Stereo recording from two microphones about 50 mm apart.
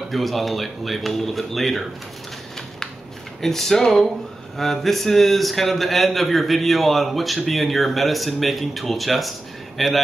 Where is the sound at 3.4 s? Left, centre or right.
Centre.